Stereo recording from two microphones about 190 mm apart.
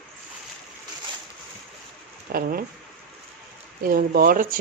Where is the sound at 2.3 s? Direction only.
55° right (ahead or behind).